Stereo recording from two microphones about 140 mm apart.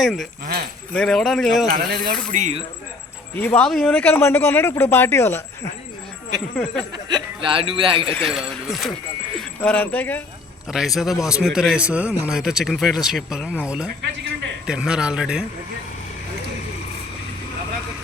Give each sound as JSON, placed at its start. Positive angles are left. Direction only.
{"t": 0.0, "sound": "a man's voice", "side_deg": 0}
{"t": 0.4, "sound": "keys jangling", "side_deg": -90}
{"t": 0.9, "sound": "a man's voice", "side_deg": 5}
{"t": 1.7, "sound": "speech", "side_deg": -70}
{"t": 3.3, "sound": "speech", "side_deg": 10}
{"t": 7.1, "sound": "speech", "side_deg": -35}
{"t": 8.2, "sound": "a man's voice", "side_deg": 0}
{"t": 9.4, "sound": "speech", "side_deg": 10}
{"t": 10.7, "sound": "a man's voice", "side_deg": 0}